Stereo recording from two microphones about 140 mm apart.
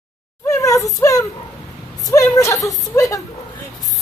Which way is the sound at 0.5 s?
25° left (ahead or behind).